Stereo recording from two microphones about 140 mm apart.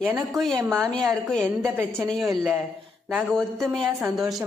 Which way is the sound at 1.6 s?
15° right (ahead or behind).